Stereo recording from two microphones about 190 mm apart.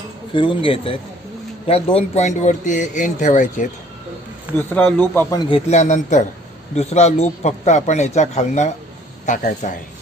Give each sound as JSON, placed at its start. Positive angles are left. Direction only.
{"t": 0.3, "sound": "a man's voice", "side_deg": 25}
{"t": 4.6, "sound": "speech", "side_deg": 5}
{"t": 5.7, "sound": "a man's voice", "side_deg": 40}